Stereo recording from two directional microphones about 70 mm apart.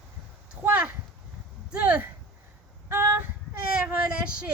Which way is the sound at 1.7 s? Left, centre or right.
Centre.